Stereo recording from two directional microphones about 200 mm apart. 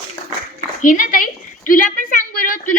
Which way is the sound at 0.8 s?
45° left (ahead or behind).